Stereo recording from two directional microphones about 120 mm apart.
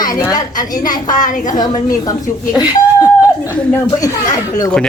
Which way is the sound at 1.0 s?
90° left.